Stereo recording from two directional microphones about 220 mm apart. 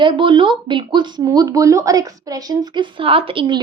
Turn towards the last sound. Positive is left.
turn(degrees=-20)  # may be behind; listen again after turning